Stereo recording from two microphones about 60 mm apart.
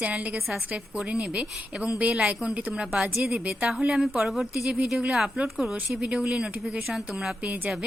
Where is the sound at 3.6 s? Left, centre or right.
Centre.